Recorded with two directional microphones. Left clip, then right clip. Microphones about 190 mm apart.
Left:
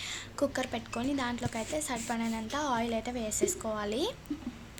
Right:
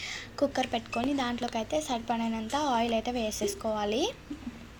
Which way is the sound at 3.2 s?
25° left (ahead or behind).